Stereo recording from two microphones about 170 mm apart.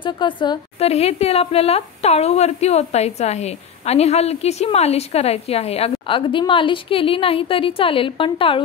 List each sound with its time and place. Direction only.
0.0 s a woman's voice: 25° left (ahead or behind)